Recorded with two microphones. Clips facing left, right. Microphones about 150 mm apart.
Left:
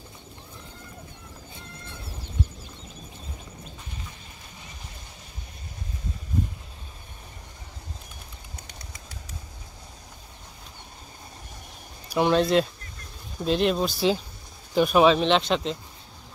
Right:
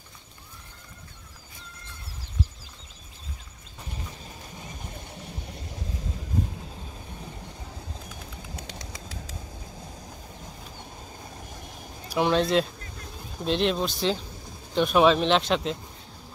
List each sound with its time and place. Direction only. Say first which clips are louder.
8.5 s bird: right 4 dB; 90° right
12.1 s speech: left 2 dB; centre (ahead or behind)